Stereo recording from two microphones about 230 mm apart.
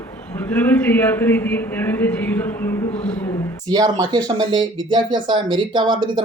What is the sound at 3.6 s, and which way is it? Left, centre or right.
Speech, centre.